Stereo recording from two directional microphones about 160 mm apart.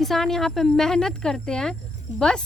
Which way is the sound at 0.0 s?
Centre (ahead or behind).